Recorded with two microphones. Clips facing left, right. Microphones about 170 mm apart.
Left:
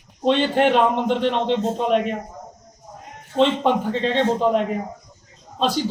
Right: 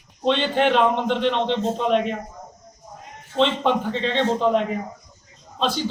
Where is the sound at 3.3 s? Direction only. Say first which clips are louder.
Left 2 dB; 10° left (ahead or behind).